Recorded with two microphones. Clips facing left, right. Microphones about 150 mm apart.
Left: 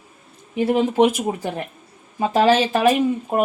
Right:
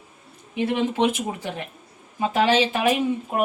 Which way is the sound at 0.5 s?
40° left (ahead or behind).